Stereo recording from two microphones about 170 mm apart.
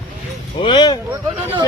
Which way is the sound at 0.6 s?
25° left (ahead or behind).